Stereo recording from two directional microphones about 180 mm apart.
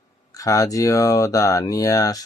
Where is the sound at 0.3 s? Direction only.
20° left (ahead or behind).